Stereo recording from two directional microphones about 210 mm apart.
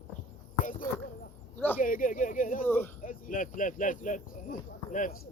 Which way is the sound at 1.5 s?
10° left (ahead or behind).